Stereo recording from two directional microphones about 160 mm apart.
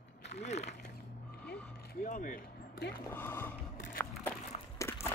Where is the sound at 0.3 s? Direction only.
45° left (ahead or behind).